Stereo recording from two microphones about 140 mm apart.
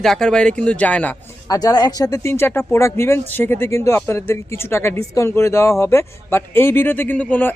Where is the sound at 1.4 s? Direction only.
30° left (ahead or behind).